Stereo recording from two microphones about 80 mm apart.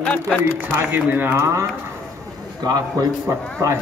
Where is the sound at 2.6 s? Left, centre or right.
Right.